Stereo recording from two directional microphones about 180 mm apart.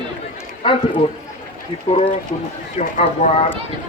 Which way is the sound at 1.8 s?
30° left (ahead or behind).